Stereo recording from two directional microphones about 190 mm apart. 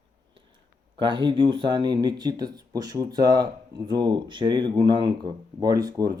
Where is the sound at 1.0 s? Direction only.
25° right (ahead or behind).